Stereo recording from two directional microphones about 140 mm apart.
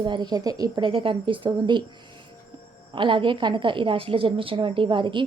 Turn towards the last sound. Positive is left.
turn(degrees=-35)  # may be behind; listen again after turning